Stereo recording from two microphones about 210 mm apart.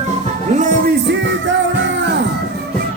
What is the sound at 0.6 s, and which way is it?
Music, 50° right (ahead or behind).